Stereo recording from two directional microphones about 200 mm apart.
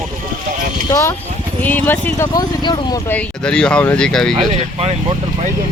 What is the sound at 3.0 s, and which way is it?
Speech, 5° left (ahead or behind).